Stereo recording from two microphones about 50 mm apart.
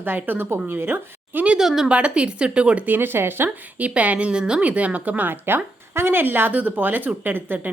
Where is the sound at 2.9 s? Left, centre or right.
Right.